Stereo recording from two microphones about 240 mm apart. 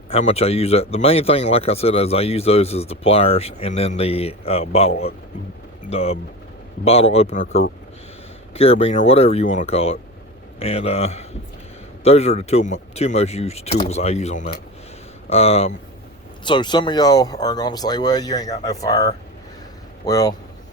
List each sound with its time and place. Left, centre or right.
0.1 s speech: left
5.9 s speech: left